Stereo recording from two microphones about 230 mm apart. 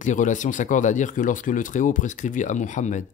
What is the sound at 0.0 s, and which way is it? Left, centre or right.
Speech, left.